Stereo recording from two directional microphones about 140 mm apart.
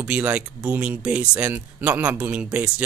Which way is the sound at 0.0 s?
10° right (ahead or behind).